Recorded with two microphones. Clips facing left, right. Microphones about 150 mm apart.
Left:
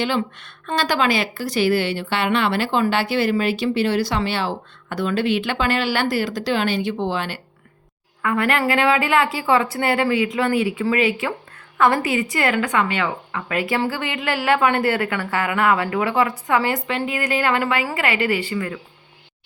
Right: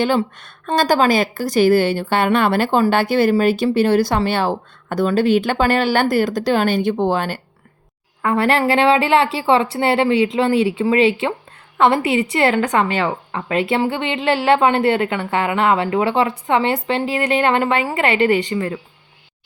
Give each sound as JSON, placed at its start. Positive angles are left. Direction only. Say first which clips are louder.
{"t": 0.0, "sound": "a woman's voice", "louder": "right 5 dB", "side_deg": -45}
{"t": 8.2, "sound": "a woman's voice", "louder": "right 4 dB", "side_deg": -30}